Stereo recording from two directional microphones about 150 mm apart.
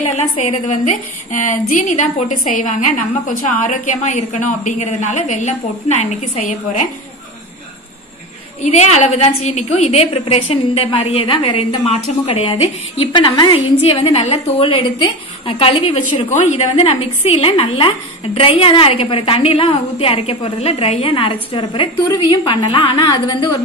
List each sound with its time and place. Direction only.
0.1 s a woman's voice: 50° left (ahead or behind)
8.6 s a woman's voice: 50° left (ahead or behind); by 23.6 s 25° left (ahead or behind)